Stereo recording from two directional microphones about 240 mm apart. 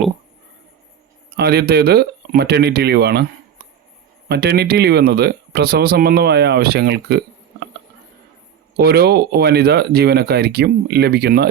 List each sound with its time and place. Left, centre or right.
1.4 s speech: right
4.3 s speech: right
8.7 s speech: right